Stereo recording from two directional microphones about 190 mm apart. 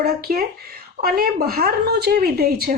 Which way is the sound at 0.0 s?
55° right (ahead or behind).